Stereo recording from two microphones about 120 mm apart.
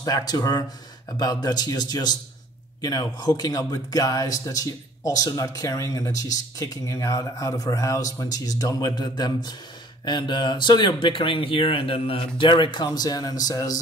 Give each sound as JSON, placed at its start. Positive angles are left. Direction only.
{"t": 0.0, "sound": "speech", "side_deg": 35}